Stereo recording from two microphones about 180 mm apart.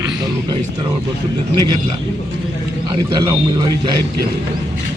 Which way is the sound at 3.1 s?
25° right (ahead or behind).